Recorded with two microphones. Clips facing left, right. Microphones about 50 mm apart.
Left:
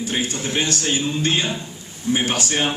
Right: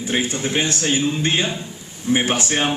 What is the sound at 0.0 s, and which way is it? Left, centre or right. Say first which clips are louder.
Speech: right 2 dB; right.